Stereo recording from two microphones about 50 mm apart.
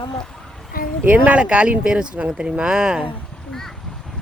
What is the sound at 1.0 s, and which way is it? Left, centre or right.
Speech, right.